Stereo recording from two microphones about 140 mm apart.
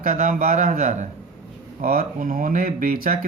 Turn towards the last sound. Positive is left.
turn(degrees=-90)